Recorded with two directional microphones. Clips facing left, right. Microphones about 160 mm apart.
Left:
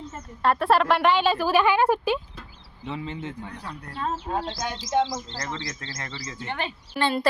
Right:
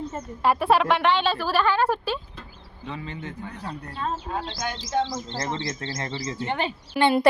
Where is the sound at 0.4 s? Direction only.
5° right (ahead or behind); by 3.3 s 25° left (ahead or behind).